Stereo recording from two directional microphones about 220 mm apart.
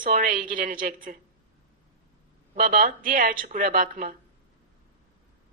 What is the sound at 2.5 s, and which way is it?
A woman's voice, 40° right (ahead or behind).